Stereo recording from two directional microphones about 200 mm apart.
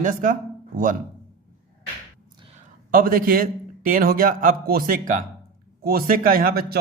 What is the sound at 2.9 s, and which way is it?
A man's voice, 45° right (ahead or behind).